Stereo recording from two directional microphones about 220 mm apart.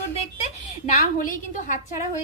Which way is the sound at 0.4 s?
35° left (ahead or behind).